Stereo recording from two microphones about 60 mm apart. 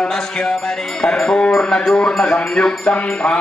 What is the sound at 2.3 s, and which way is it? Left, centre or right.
Music, centre.